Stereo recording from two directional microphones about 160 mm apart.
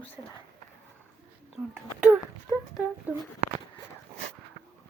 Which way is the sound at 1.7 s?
15° right (ahead or behind).